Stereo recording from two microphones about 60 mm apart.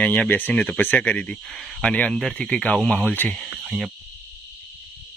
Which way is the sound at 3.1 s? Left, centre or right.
Left.